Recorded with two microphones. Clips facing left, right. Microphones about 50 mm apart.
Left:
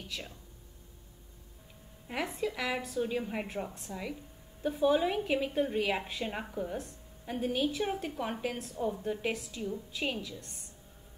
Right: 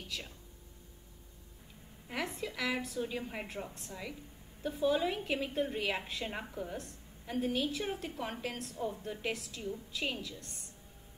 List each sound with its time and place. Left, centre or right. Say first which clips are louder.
0.1 s a woman's voice: left 1 dB; centre
2.0 s a woman's voice: left 4 dB; centre
4.6 s a woman's voice: left 4 dB; left
4.9 s a woman's voice: left 4 dB; centre